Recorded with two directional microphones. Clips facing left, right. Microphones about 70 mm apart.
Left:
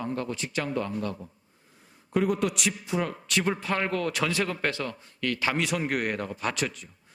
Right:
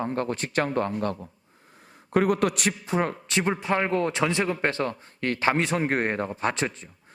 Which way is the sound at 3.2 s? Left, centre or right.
Right.